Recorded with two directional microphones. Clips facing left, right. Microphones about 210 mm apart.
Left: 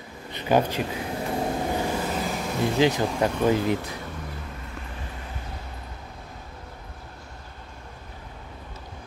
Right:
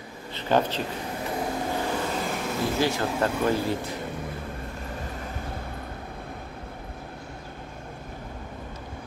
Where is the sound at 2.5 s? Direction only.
15° left (ahead or behind).